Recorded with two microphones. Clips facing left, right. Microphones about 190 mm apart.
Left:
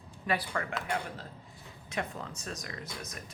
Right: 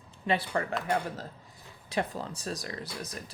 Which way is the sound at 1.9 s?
35° right (ahead or behind).